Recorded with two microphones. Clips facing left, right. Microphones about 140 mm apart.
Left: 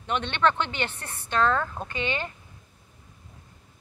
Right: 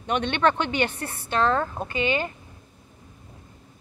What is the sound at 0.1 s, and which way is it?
Speech, 15° right (ahead or behind).